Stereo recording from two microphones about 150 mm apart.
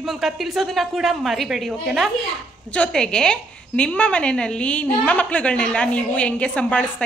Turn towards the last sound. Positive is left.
turn(degrees=10)  # may be behind; listen again after turning